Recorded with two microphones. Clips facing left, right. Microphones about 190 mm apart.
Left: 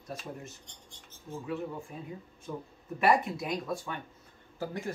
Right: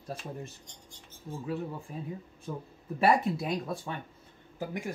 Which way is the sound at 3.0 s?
30° right (ahead or behind).